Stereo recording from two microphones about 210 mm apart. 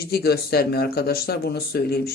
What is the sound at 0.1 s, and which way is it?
A man's voice, 50° left (ahead or behind).